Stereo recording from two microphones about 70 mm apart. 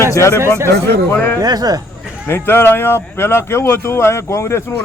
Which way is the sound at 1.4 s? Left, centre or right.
Right.